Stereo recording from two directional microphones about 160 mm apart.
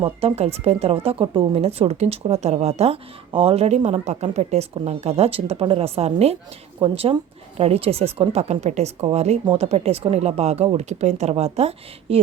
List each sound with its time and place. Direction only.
0.0 s speech: 40° right (ahead or behind)